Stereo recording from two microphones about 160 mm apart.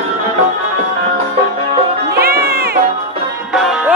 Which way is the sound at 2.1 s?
75° right (ahead or behind).